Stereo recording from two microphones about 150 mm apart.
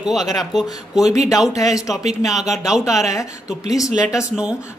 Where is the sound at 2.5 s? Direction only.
5° right (ahead or behind).